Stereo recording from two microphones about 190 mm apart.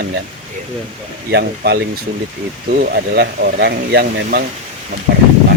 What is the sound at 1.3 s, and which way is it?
Speech, 60° right (ahead or behind).